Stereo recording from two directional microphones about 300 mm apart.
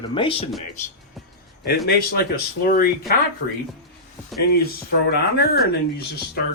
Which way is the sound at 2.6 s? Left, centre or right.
Left.